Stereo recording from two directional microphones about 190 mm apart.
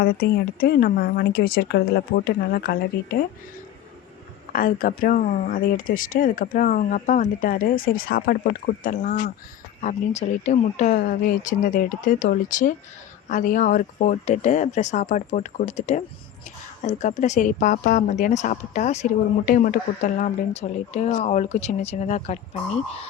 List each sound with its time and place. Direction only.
0.0 s speech: 55° left (ahead or behind)
4.5 s speech: 45° left (ahead or behind)
9.8 s speech: 35° left (ahead or behind)